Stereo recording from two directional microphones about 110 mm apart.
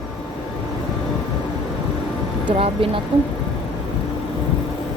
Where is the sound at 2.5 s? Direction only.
55° right (ahead or behind).